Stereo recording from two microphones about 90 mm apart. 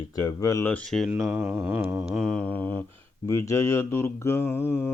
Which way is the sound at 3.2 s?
35° left (ahead or behind).